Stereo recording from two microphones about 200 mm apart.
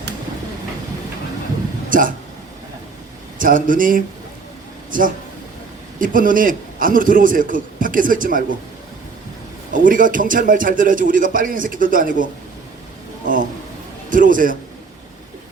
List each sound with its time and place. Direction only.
1.9 s a sound: 40° right (ahead or behind)
3.3 s a man's voice: 40° right (ahead or behind)
9.8 s a man's voice: 40° right (ahead or behind)